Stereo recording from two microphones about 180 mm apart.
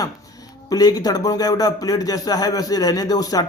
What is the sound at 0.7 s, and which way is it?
Speech, 20° left (ahead or behind).